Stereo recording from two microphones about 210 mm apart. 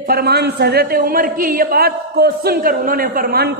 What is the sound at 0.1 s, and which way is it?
A man's voice, 50° right (ahead or behind).